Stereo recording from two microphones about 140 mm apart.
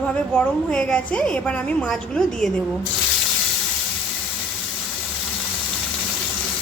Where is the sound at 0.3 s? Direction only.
5° left (ahead or behind).